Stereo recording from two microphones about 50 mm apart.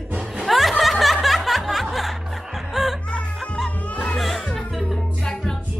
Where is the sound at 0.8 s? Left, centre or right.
Centre.